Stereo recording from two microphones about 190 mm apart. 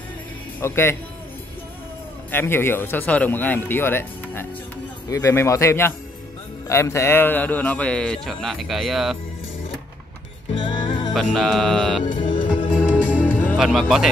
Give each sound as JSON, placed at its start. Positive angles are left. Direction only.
{"t": 0.6, "sound": "speech", "side_deg": 15}
{"t": 2.3, "sound": "a man's voice", "side_deg": 10}
{"t": 10.5, "sound": "music", "side_deg": 25}
{"t": 11.1, "sound": "a man's voice", "side_deg": 0}
{"t": 12.7, "sound": "music", "side_deg": 10}
{"t": 13.6, "sound": "a man's voice", "side_deg": 0}